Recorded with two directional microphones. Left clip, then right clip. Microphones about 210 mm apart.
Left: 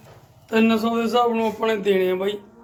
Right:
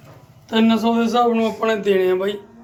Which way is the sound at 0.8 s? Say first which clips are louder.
Right 3 dB; 5° left (ahead or behind).